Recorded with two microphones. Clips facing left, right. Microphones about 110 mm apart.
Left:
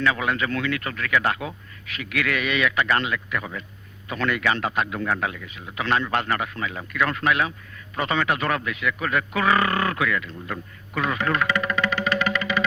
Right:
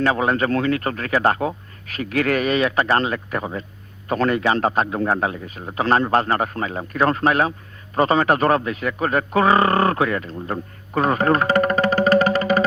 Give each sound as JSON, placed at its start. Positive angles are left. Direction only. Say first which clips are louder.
{"t": 0.0, "sound": "a man's voice", "louder": "right 5 dB", "side_deg": -35}